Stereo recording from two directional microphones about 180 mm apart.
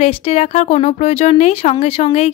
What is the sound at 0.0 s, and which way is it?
Speech, 35° left (ahead or behind).